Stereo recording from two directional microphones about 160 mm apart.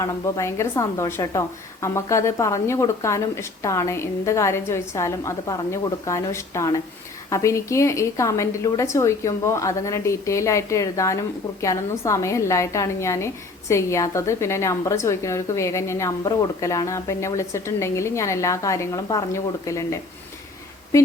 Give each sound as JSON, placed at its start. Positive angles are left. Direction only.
{"t": 0.0, "sound": "a woman's voice", "side_deg": 20}